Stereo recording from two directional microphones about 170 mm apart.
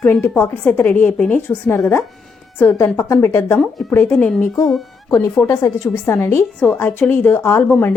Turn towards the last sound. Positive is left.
turn(degrees=15)  # may be behind; listen again after turning